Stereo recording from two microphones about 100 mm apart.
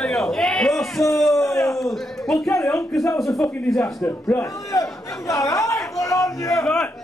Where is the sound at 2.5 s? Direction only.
30° left (ahead or behind).